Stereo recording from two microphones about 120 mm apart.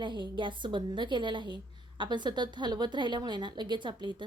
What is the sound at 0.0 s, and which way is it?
A woman's voice, 40° right (ahead or behind).